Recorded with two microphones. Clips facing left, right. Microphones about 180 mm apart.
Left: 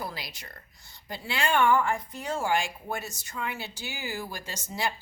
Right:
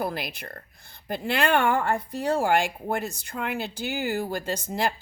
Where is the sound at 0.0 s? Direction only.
55° right (ahead or behind).